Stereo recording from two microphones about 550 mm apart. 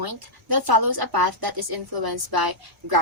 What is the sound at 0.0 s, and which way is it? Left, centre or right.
A woman's voice, right.